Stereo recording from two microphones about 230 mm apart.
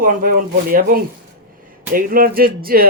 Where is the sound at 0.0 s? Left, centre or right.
Right.